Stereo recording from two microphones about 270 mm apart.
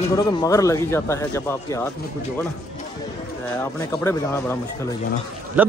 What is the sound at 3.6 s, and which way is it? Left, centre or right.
Speech, centre.